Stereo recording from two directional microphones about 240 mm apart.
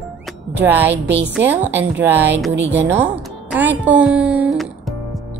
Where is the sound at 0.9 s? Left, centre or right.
Right.